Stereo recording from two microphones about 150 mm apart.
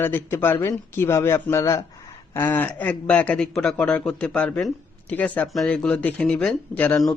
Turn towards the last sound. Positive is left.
turn(degrees=5)  # may be behind; listen again after turning